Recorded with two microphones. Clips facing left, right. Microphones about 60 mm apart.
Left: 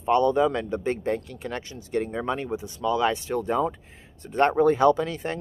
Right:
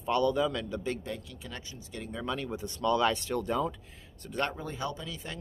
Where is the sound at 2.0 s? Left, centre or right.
Left.